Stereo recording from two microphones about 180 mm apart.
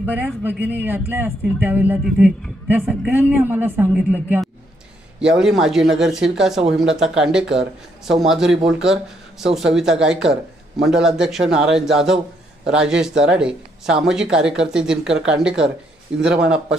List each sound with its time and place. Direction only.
0.0 s a man's voice: 10° right (ahead or behind)